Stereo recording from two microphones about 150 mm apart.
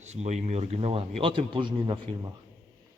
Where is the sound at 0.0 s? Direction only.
50° right (ahead or behind); by 2.3 s 30° right (ahead or behind).